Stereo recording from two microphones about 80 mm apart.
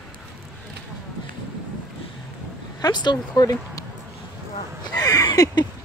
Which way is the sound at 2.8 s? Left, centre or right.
Left.